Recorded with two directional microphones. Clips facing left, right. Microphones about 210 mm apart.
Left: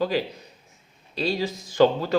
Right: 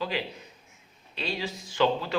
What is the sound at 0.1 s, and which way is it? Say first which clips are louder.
Speech: left 7 dB; 40° left (ahead or behind).